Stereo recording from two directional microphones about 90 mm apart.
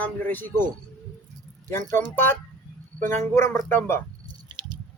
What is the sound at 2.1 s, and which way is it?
Speech, 25° left (ahead or behind).